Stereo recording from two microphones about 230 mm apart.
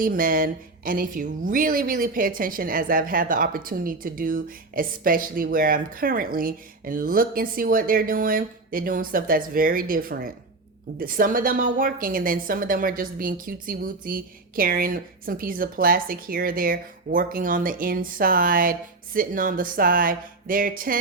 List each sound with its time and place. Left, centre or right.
0.0 s speech: right